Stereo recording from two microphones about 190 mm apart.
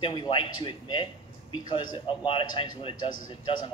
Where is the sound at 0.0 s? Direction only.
25° left (ahead or behind).